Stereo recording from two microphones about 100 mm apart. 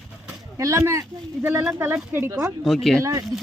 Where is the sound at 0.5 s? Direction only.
30° right (ahead or behind).